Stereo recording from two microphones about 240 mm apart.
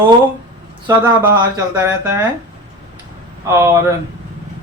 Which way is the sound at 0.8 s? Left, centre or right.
Centre.